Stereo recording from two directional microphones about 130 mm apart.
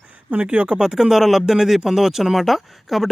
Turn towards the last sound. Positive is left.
turn(degrees=0)  # may be behind; listen again after turning